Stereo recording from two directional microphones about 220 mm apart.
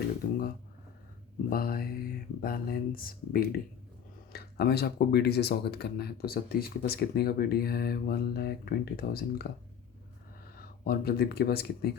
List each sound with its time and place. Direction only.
1.5 s speech: 40° left (ahead or behind)
10.6 s speech: 40° left (ahead or behind)